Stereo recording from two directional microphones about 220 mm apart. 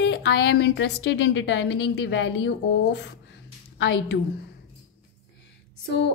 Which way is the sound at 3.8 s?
55° left (ahead or behind).